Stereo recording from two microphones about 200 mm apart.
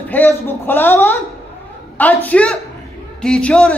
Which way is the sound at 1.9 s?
10° left (ahead or behind).